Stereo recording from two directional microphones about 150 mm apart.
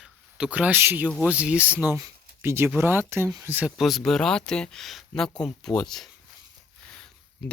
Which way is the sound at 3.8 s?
Centre (ahead or behind).